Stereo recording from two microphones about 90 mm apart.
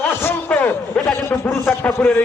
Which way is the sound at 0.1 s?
25° left (ahead or behind).